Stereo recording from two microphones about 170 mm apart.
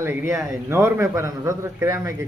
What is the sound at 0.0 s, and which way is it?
A man's voice, 15° right (ahead or behind).